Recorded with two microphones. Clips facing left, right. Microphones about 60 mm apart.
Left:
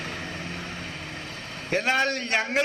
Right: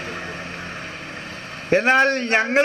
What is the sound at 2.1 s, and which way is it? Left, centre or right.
Speech, right.